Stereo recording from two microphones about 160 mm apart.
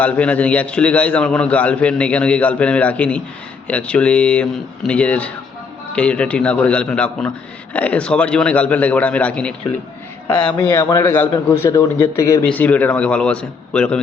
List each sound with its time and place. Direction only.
0.0 s a man's voice: 10° left (ahead or behind)
10.7 s a man's voice: 20° left (ahead or behind)
12.4 s a man's voice: 10° left (ahead or behind)